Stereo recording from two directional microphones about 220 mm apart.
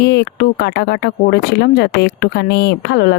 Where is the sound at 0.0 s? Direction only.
50° left (ahead or behind).